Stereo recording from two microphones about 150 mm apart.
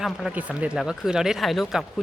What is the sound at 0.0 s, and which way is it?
Speech, 5° right (ahead or behind).